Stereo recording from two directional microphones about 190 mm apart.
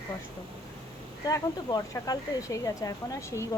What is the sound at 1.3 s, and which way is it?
Speech, 20° left (ahead or behind).